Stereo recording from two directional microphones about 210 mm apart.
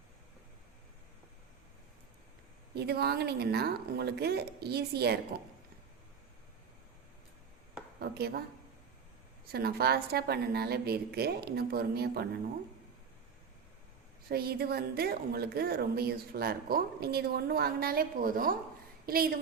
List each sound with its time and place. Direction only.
2.7 s a woman's voice: 50° right (ahead or behind)
7.9 s a sound: 50° right (ahead or behind)
9.5 s a woman's voice: 50° right (ahead or behind)
14.3 s a woman's voice: 50° right (ahead or behind)